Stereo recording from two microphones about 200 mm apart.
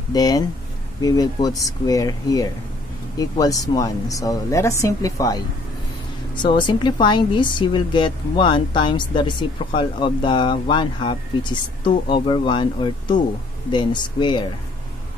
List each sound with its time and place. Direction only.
0.1 s a woman's voice: 20° left (ahead or behind)